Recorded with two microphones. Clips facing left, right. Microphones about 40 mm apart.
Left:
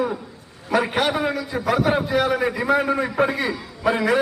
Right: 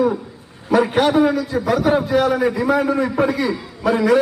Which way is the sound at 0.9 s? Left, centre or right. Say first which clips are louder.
Right 6 dB; centre.